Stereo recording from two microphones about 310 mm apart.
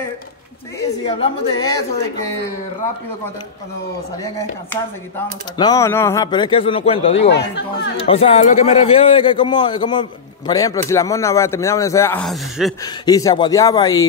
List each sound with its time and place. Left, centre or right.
0.7 s a man's voice: centre
5.1 s a man's voice: centre
7.2 s speech: left
8.0 s a man's voice: centre
12.8 s a man's voice: centre